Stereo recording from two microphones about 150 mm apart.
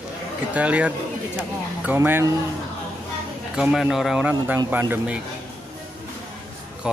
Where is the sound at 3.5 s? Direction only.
5° right (ahead or behind).